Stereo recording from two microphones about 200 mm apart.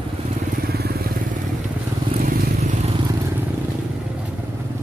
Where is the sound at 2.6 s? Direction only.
35° right (ahead or behind).